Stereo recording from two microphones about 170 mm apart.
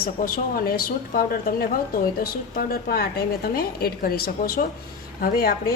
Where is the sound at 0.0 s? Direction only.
60° left (ahead or behind).